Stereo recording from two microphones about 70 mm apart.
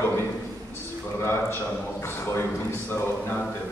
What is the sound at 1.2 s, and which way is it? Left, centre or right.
A man's voice, left.